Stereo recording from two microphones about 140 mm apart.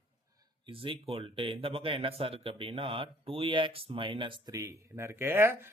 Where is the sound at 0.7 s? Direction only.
40° right (ahead or behind).